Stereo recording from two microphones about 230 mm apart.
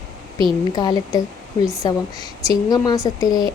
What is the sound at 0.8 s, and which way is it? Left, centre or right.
Speech, centre.